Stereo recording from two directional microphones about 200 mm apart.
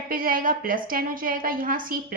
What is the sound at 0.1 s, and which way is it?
A woman's voice, 45° right (ahead or behind).